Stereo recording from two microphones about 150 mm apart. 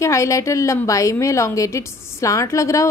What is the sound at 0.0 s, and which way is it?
A woman's voice, 20° left (ahead or behind).